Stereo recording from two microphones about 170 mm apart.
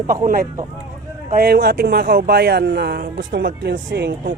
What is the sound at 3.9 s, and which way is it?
Speech, 90° right.